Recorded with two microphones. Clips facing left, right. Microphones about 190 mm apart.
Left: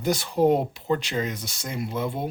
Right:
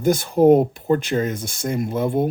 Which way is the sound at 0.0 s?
50° right (ahead or behind).